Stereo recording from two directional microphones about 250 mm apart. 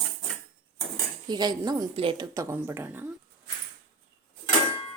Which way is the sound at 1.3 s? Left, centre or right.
Centre.